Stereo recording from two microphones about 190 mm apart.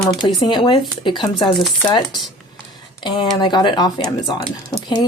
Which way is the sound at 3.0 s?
25° left (ahead or behind).